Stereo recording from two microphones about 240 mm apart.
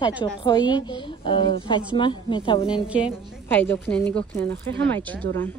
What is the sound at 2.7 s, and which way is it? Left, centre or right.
Speech, centre.